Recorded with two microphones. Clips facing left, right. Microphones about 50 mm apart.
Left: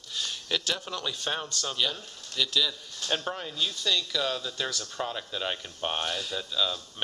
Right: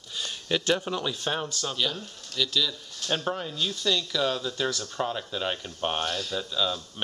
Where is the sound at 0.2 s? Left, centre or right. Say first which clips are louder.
Right 3 dB; centre.